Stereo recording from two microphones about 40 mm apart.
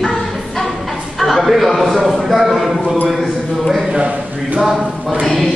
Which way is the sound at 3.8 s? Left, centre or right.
Right.